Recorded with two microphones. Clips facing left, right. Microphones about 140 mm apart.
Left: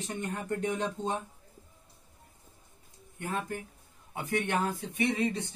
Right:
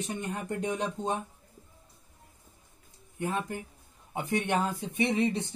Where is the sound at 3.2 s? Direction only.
20° right (ahead or behind).